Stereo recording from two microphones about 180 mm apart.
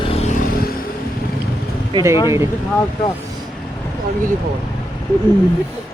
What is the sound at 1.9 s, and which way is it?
Speech, 15° right (ahead or behind).